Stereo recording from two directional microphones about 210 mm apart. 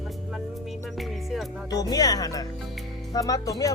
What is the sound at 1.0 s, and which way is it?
Music, centre (ahead or behind).